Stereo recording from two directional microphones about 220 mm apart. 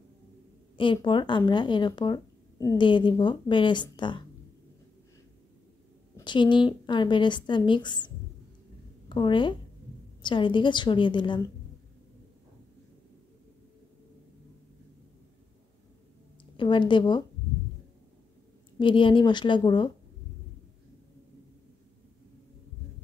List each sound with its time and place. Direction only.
0.7 s speech: 20° left (ahead or behind)
6.1 s speech: 20° left (ahead or behind)
9.1 s speech: 20° left (ahead or behind)
16.5 s speech: 20° left (ahead or behind)
18.8 s speech: 20° left (ahead or behind)